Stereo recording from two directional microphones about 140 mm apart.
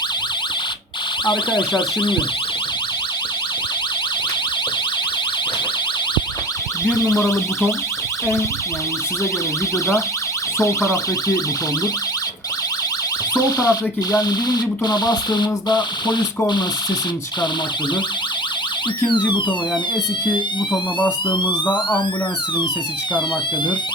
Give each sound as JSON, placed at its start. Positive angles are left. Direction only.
{"t": 1.2, "sound": "speech", "side_deg": 35}
{"t": 6.8, "sound": "speech", "side_deg": 25}
{"t": 10.6, "sound": "speech", "side_deg": 20}
{"t": 13.3, "sound": "speech", "side_deg": 25}
{"t": 19.0, "sound": "speech", "side_deg": 35}
{"t": 21.2, "sound": "speech", "side_deg": 35}